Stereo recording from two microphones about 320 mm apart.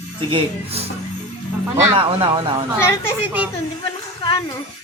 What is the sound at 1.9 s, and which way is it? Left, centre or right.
Speech, centre.